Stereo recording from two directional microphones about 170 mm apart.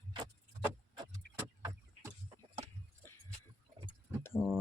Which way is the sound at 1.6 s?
25° right (ahead or behind).